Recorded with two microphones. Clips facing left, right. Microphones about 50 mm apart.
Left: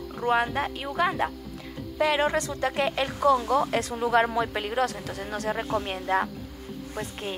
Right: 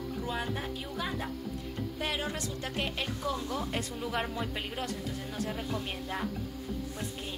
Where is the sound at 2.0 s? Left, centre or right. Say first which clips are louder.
Left 12 dB; left.